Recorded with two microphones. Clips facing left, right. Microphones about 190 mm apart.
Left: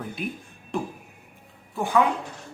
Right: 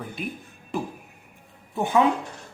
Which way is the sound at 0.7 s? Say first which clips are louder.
Even; 5° right (ahead or behind).